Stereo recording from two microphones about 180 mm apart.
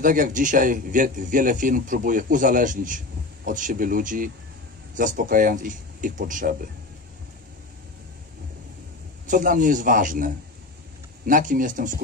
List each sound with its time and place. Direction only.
0.0 s speech: 50° right (ahead or behind)
9.3 s speech: 45° right (ahead or behind)